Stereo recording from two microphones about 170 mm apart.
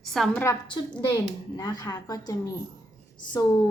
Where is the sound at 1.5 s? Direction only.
25° left (ahead or behind).